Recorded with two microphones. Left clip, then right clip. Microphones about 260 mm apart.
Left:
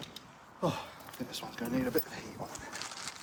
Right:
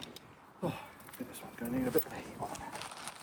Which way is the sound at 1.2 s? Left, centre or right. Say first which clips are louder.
Left 3 dB; centre.